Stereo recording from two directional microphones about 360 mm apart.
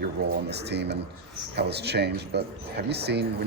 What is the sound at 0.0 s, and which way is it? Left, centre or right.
Speech, right.